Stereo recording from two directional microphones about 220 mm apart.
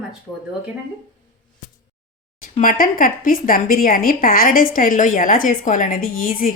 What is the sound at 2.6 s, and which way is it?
A woman's voice, 40° left (ahead or behind).